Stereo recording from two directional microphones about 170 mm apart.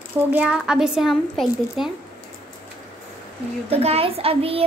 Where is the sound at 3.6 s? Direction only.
35° right (ahead or behind).